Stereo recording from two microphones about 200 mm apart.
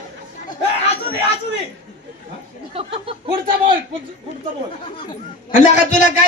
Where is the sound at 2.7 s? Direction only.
30° right (ahead or behind).